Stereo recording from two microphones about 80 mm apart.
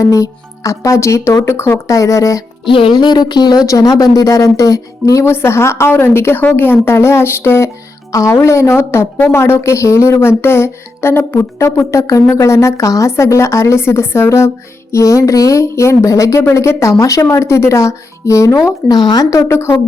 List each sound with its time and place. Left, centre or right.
0.0 s speech: left
1.9 s speech: left
2.6 s speech: left
3.7 s speech: left
5.2 s speech: left
11.6 s speech: left
19.5 s speech: left